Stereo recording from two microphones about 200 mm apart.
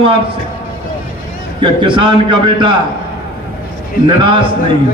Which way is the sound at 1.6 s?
25° right (ahead or behind).